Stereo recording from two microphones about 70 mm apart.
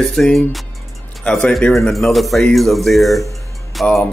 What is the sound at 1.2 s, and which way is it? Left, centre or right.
Speech, centre.